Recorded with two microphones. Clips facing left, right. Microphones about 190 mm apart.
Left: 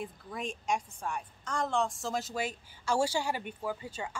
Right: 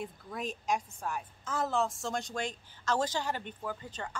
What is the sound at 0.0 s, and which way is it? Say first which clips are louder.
A woman's voice: even; centre (ahead or behind).